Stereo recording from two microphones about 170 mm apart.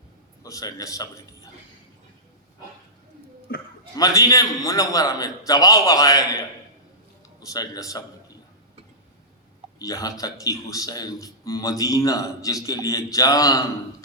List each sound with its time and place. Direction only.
0.4 s a man's voice: 20° left (ahead or behind)
3.5 s a sound: 65° left (ahead or behind)
3.9 s speech: 20° left (ahead or behind)
9.7 s speech: 20° left (ahead or behind)